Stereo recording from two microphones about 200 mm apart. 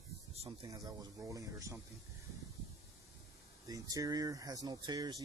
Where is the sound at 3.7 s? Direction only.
20° right (ahead or behind).